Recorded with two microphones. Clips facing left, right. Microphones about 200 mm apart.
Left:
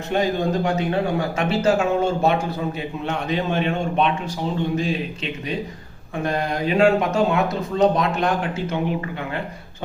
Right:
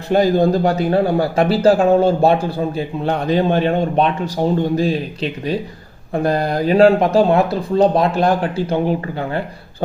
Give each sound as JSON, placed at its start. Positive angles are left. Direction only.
{"t": 0.1, "sound": "speech", "side_deg": -35}